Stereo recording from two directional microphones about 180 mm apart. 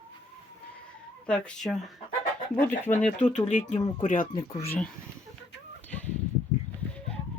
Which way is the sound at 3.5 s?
40° left (ahead or behind).